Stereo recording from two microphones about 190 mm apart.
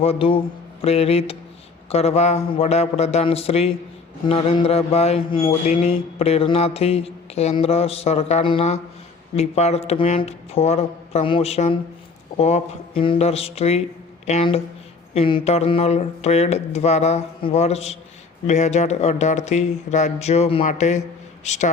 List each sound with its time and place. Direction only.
0.0 s speech: 30° left (ahead or behind)